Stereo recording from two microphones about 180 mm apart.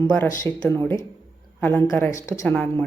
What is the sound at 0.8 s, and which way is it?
A woman's voice, 10° left (ahead or behind).